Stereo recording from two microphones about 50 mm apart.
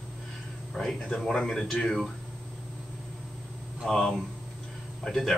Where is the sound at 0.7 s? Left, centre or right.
Centre.